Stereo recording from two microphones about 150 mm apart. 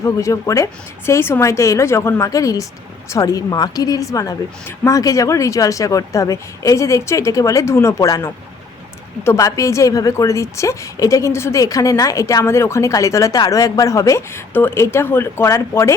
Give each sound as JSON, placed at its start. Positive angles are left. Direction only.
{"t": 0.0, "sound": "a woman's voice", "side_deg": 20}